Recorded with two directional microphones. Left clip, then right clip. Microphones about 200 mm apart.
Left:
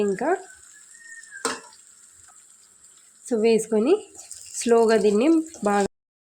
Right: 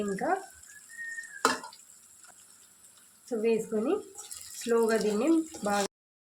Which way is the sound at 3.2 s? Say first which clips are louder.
Left 8 dB; 50° left (ahead or behind).